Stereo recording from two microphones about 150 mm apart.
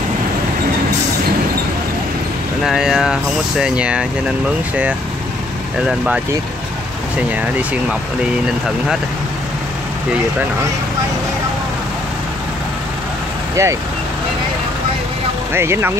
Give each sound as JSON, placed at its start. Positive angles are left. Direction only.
{"t": 2.6, "sound": "speech", "side_deg": 0}
{"t": 5.9, "sound": "speech", "side_deg": -5}
{"t": 13.6, "sound": "speech", "side_deg": -20}
{"t": 15.5, "sound": "speech", "side_deg": -15}